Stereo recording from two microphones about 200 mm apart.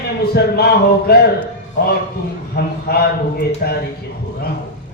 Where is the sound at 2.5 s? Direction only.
50° left (ahead or behind).